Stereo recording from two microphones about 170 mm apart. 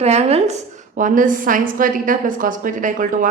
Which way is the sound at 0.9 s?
50° right (ahead or behind).